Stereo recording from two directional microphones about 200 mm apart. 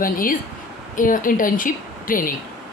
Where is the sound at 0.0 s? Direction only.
45° left (ahead or behind).